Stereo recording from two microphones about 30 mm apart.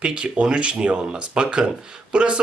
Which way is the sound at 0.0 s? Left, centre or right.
Right.